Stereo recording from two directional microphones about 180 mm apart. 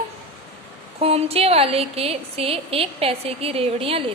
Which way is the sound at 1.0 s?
35° right (ahead or behind).